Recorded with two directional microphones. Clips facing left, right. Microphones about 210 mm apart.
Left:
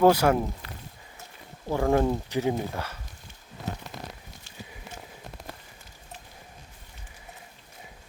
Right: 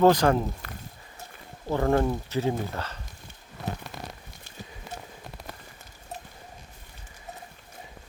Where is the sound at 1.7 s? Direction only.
10° left (ahead or behind).